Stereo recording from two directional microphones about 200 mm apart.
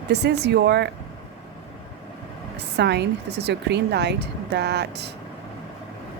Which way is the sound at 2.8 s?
55° right (ahead or behind).